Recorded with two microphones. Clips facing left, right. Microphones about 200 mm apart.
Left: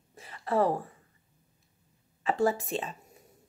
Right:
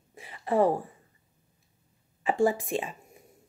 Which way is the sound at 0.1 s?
15° right (ahead or behind).